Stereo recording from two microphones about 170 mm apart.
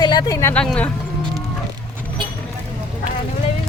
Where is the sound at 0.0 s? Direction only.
25° left (ahead or behind).